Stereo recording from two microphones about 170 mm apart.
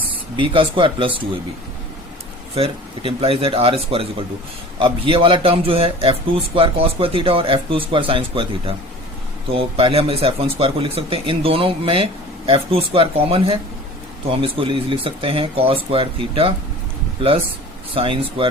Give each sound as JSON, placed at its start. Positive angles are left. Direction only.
{"t": 0.1, "sound": "speech", "side_deg": -30}
{"t": 2.6, "sound": "speech", "side_deg": -30}
{"t": 17.9, "sound": "speech", "side_deg": -30}